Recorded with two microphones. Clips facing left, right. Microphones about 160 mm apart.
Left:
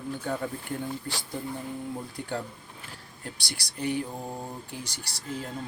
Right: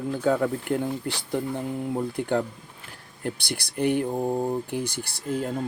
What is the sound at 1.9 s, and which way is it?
Speech, 60° right (ahead or behind).